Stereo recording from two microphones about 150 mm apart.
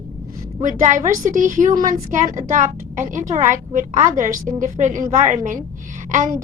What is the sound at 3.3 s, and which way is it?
A woman's voice, 55° right (ahead or behind).